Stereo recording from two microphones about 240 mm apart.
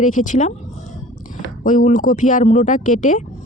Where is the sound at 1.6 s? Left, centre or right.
Left.